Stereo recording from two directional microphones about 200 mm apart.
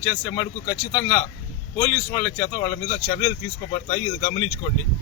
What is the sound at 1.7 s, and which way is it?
Speech, 10° left (ahead or behind).